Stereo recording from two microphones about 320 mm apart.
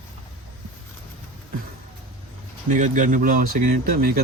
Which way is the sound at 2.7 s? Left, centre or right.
Right.